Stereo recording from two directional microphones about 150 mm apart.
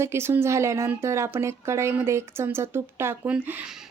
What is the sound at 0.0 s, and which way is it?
Speech, 15° right (ahead or behind).